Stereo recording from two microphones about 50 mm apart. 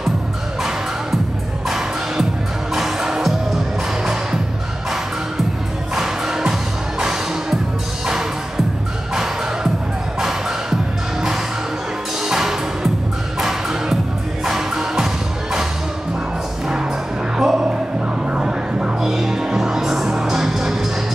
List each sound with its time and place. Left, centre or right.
1.7 s music: centre
5.9 s music: centre
9.1 s music: centre
12.3 s music: centre
17.4 s a sound: centre
18.9 s music: centre